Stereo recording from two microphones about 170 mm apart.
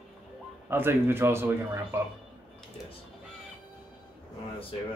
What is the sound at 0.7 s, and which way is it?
Speech, 15° right (ahead or behind).